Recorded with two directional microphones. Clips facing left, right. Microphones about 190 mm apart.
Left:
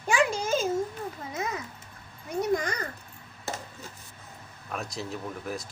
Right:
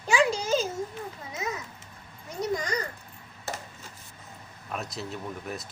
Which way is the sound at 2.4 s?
55° left (ahead or behind).